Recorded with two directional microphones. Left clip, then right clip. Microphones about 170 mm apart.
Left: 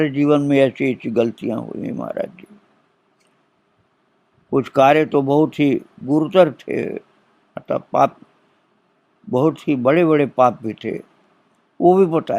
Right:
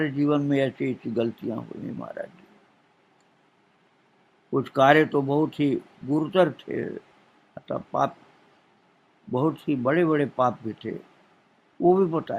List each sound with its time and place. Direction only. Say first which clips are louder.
0.0 s speech: left 8 dB; 40° left (ahead or behind)
4.5 s speech: left 5 dB; 35° left (ahead or behind)
9.3 s speech: left 8 dB; 35° left (ahead or behind)